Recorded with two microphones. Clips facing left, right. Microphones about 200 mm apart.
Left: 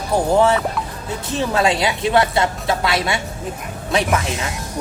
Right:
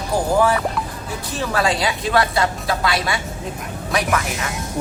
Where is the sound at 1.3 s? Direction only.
25° left (ahead or behind).